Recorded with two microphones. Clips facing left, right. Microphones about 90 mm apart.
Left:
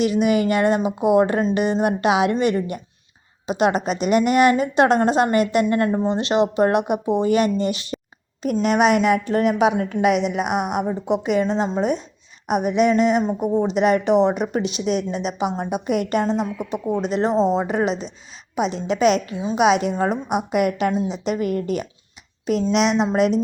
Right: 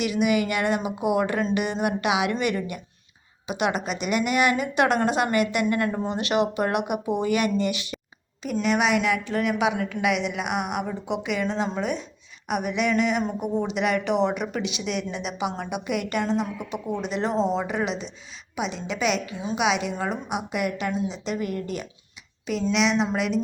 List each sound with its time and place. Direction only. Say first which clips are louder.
0.0 s a woman's voice: left 5 dB; 35° left (ahead or behind); by 21.3 s 55° left (ahead or behind)
21.4 s speech: left 7 dB; 5° left (ahead or behind)
22.7 s a woman's voice: left 3 dB; 40° left (ahead or behind)